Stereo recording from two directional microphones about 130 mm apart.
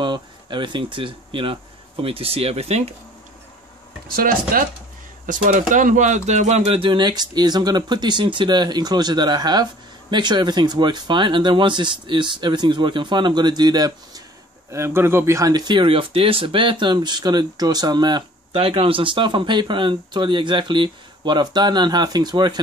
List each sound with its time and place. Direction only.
0.0 s speech: 35° right (ahead or behind); by 2.9 s 55° right (ahead or behind)
4.2 s speech: 90° right; by 14.2 s 30° right (ahead or behind)
14.7 s speech: 20° right (ahead or behind)
18.5 s speech: 45° right (ahead or behind)